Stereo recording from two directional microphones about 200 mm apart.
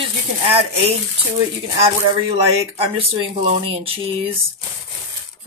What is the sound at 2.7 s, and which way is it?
Speech, 30° right (ahead or behind).